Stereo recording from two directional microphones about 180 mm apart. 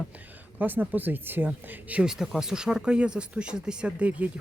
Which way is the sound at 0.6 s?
10° right (ahead or behind).